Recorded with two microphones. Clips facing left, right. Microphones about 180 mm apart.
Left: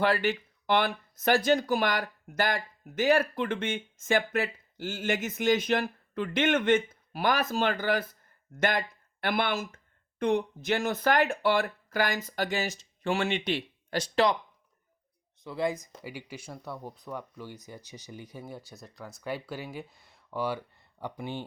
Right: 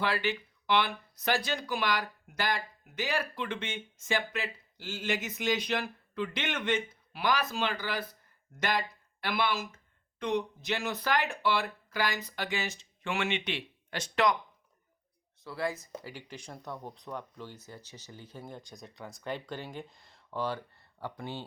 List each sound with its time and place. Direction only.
0.0 s speech: 50° left (ahead or behind)
9.2 s speech: 50° left (ahead or behind); by 14.3 s 35° left (ahead or behind)
15.4 s speech: 20° left (ahead or behind)